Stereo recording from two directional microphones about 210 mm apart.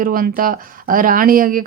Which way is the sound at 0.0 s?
40° right (ahead or behind).